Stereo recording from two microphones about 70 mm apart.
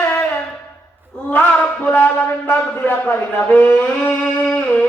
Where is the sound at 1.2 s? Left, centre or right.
Left.